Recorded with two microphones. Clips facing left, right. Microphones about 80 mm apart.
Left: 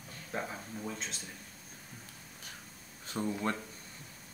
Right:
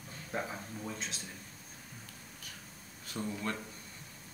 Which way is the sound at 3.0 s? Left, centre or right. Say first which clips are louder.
Left 3 dB; left.